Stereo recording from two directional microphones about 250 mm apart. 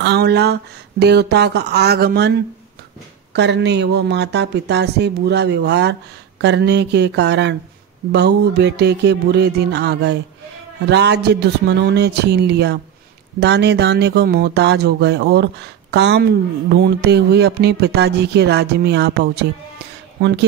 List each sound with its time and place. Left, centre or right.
0.0 s speech: right
3.3 s speech: right